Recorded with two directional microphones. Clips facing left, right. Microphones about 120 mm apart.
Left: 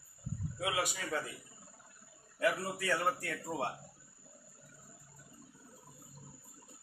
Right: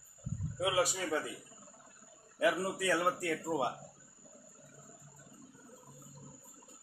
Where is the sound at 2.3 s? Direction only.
15° right (ahead or behind).